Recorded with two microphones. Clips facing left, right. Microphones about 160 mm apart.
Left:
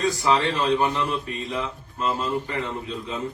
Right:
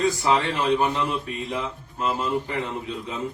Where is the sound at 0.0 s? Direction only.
20° right (ahead or behind).